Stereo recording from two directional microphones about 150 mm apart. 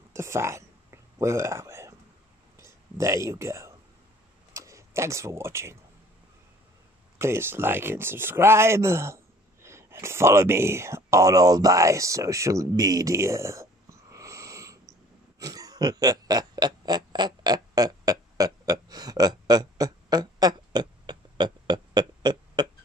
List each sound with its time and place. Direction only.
0.1 s whispering: 20° right (ahead or behind)
2.5 s a sound: 20° right (ahead or behind)
4.6 s speech: 20° right (ahead or behind)
7.2 s speech: 15° right (ahead or behind)
15.3 s pig: 25° right (ahead or behind)